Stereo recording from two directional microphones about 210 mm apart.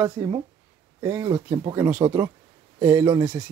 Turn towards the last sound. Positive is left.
turn(degrees=-10)  # may be behind; listen again after turning